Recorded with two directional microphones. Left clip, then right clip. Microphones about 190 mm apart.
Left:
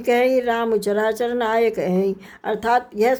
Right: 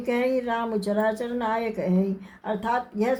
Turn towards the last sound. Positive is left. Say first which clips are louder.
# left 7 dB
turn(degrees=45)  # may be behind; listen again after turning